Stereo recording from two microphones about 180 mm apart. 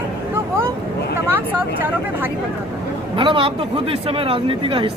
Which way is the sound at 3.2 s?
30° right (ahead or behind).